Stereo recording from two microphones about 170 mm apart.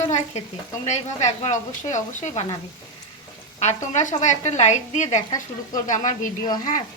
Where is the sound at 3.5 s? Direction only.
45° left (ahead or behind).